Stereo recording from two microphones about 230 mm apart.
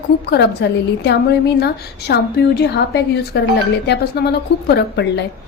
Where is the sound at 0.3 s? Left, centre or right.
Left.